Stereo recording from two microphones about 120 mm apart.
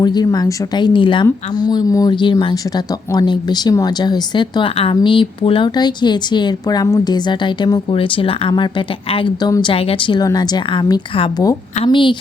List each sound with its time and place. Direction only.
0.0 s speech: 35° left (ahead or behind)
9.7 s a woman's voice: 50° left (ahead or behind)